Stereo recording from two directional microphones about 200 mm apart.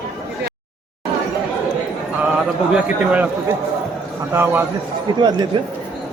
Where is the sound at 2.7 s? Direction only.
5° right (ahead or behind).